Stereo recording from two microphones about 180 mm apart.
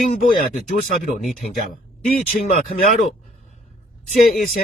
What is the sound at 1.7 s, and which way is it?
Speech, 50° left (ahead or behind).